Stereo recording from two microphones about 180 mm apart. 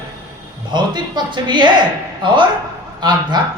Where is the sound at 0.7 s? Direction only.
25° right (ahead or behind).